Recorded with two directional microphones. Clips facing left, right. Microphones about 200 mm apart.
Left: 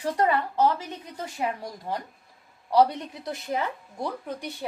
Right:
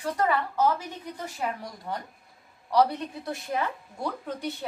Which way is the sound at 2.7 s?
25° left (ahead or behind).